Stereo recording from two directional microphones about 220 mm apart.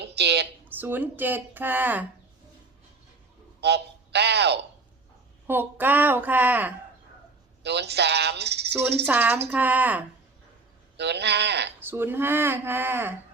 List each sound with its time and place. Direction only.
0.0 s a sound: 50° right (ahead or behind)
0.7 s speech: 10° right (ahead or behind)
3.6 s speech: 50° right (ahead or behind)
5.5 s speech: 10° right (ahead or behind)
7.6 s speech: 50° right (ahead or behind)
9.0 s speech: 10° right (ahead or behind)
10.9 s speech: 50° right (ahead or behind)
11.8 s speech: 10° right (ahead or behind)